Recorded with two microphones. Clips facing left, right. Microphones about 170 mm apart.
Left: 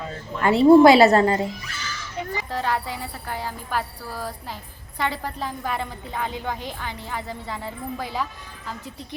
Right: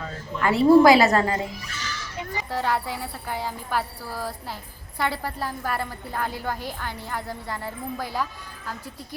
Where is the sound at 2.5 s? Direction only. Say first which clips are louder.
Right 1 dB; 10° right (ahead or behind).